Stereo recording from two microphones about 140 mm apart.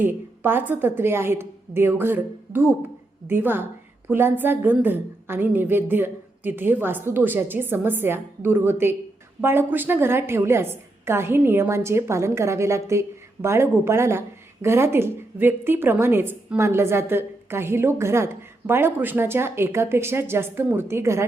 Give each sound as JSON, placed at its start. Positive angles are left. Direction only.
{"t": 0.0, "sound": "a woman's voice", "side_deg": -15}